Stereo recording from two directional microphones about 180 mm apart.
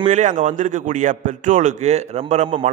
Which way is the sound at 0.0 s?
40° right (ahead or behind).